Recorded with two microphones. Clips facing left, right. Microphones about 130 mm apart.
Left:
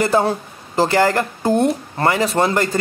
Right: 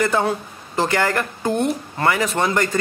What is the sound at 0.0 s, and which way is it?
A woman's voice, 35° left (ahead or behind).